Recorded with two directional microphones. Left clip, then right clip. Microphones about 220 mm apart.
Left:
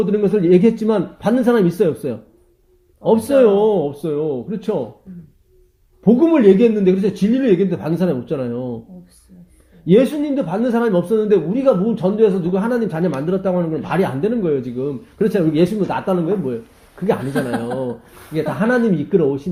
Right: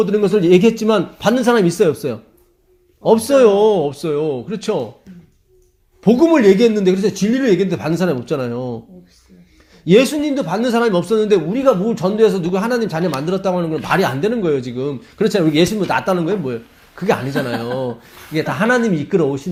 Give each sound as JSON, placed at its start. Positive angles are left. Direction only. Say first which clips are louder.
{"t": 0.0, "sound": "a man's voice", "louder": "right 2 dB", "side_deg": -30}
{"t": 6.0, "sound": "speech", "louder": "right 1 dB", "side_deg": -30}
{"t": 9.8, "sound": "a man's voice", "louder": "right 2 dB", "side_deg": -30}